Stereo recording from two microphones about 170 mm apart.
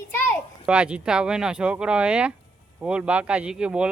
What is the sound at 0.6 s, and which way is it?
Speech, 5° right (ahead or behind).